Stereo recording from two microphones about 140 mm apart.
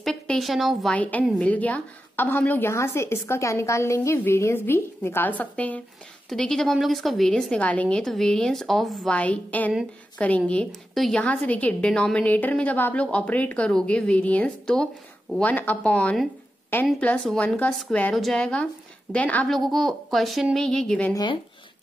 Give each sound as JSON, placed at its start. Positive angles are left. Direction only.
{"t": 0.0, "sound": "a woman's voice", "side_deg": 5}
{"t": 0.9, "sound": "a woman's voice", "side_deg": 10}
{"t": 19.5, "sound": "a woman's voice", "side_deg": 0}
{"t": 21.1, "sound": "speech", "side_deg": 30}